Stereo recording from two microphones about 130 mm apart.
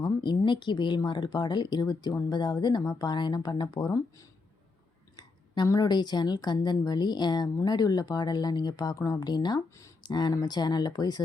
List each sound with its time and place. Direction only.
0.0 s speech: 35° left (ahead or behind)